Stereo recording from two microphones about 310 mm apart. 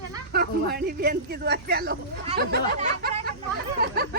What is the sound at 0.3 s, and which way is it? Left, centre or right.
Speech, right.